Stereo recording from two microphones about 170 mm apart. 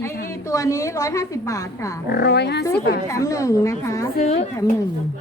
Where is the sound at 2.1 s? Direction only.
75° left (ahead or behind).